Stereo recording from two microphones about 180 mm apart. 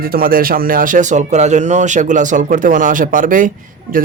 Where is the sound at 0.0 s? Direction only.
55° right (ahead or behind).